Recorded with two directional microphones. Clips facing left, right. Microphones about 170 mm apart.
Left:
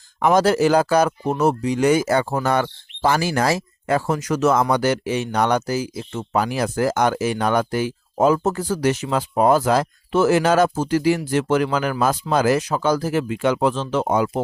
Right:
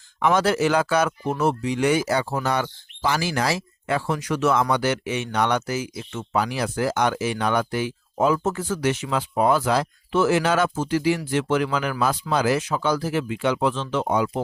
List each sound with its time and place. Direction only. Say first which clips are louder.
0.2 s speech: left 4 dB; 40° left (ahead or behind)